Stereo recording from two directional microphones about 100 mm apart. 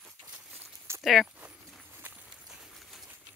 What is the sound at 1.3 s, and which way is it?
Horse, 15° right (ahead or behind).